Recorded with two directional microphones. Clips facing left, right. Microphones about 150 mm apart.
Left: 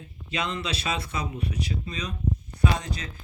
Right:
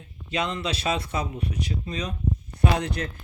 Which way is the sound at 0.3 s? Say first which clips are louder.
Right 3 dB; 45° right (ahead or behind).